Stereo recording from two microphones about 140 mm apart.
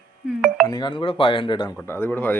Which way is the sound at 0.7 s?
35° left (ahead or behind).